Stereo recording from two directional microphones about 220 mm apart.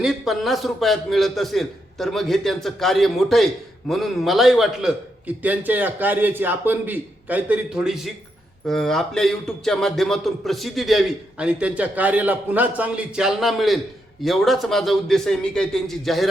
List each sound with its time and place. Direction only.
0.0 s a man's voice: centre (ahead or behind)